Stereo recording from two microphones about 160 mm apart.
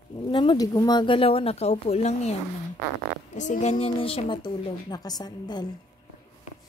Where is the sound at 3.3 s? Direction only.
50° left (ahead or behind).